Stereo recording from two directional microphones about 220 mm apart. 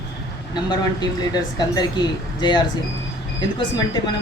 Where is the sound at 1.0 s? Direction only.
20° left (ahead or behind).